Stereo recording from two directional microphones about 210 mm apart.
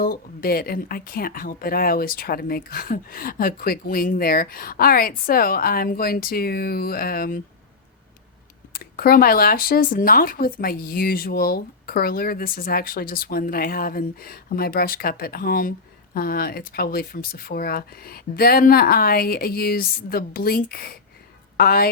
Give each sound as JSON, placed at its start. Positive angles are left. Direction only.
{"t": 0.0, "sound": "speech", "side_deg": 45}
{"t": 8.7, "sound": "speech", "side_deg": 45}